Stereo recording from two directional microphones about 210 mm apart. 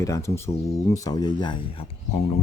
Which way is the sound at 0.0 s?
15° left (ahead or behind).